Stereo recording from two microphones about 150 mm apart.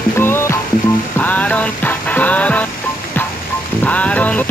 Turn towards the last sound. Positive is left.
turn(degrees=10)  # may be behind; listen again after turning